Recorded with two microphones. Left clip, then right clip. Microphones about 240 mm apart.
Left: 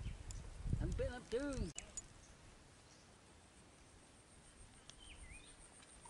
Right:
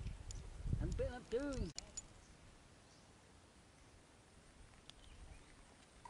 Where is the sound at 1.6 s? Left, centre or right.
Centre.